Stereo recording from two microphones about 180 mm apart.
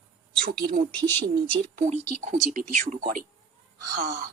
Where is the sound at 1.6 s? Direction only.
40° right (ahead or behind).